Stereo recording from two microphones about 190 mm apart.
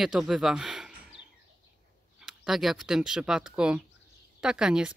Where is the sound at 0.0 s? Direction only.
5° right (ahead or behind).